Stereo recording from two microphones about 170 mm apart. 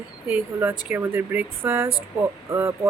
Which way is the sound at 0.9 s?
10° right (ahead or behind).